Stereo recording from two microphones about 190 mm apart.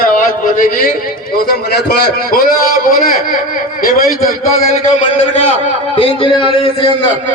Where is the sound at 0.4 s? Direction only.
40° left (ahead or behind).